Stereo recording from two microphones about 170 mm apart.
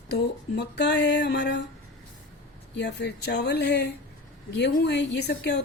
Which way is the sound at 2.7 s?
80° left.